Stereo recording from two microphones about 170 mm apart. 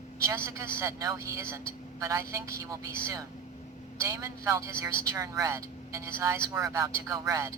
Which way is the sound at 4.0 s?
20° right (ahead or behind).